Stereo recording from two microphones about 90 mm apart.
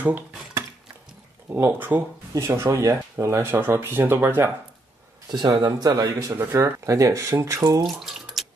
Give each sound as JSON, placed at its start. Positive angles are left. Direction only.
{"t": 1.5, "sound": "speech", "side_deg": -20}
{"t": 5.3, "sound": "speech", "side_deg": -50}
{"t": 6.3, "sound": "speech", "side_deg": -30}
{"t": 7.8, "sound": "bathtub", "side_deg": 0}